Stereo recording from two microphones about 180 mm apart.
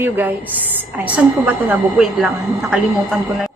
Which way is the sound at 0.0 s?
10° right (ahead or behind).